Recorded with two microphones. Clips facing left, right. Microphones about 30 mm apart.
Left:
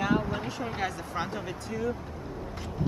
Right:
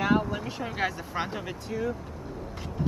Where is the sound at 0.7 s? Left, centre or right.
Centre.